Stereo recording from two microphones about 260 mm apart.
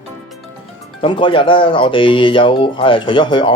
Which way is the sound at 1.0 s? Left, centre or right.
Centre.